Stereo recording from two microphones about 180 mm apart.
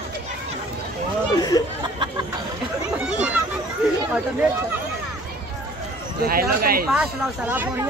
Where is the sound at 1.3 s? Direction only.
20° left (ahead or behind).